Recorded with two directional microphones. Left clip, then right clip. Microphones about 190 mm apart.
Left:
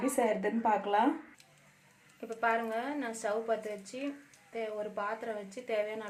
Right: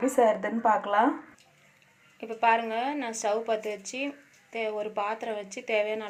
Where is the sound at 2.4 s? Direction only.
15° right (ahead or behind).